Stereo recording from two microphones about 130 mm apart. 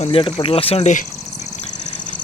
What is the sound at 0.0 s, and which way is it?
Speech, 45° left (ahead or behind).